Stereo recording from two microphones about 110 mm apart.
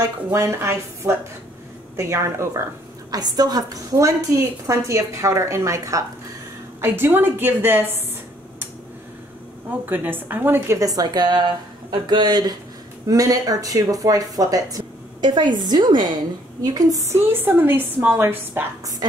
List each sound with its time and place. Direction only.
0.3 s a woman's voice: 25° right (ahead or behind)
3.1 s a woman's voice: 35° right (ahead or behind); by 8.0 s 20° right (ahead or behind)
9.8 s a woman's voice: 15° right (ahead or behind)
10.8 s a woman's voice: 35° right (ahead or behind); by 18.6 s 20° right (ahead or behind)